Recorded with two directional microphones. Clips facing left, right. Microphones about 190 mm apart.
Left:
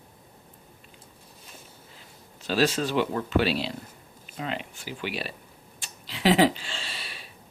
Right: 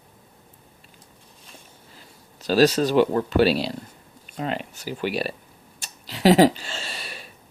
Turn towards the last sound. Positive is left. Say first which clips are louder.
# right 4 dB
turn(degrees=-45)  # may be behind; listen again after turning